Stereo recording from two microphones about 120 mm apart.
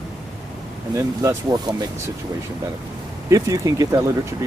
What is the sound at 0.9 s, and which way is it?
Speech, 30° right (ahead or behind).